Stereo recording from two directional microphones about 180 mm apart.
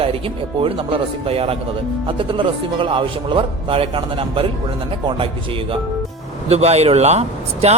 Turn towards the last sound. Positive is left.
turn(degrees=-35)  # may be behind; listen again after turning